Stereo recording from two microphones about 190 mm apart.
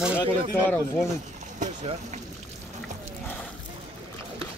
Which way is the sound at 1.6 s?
40° right (ahead or behind).